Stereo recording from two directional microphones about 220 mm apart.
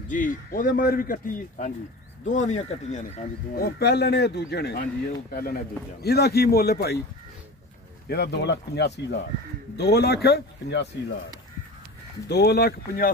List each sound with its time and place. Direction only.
0.1 s a man's voice: 40° left (ahead or behind)
8.1 s speech: 50° left (ahead or behind)
12.3 s speech: 50° left (ahead or behind)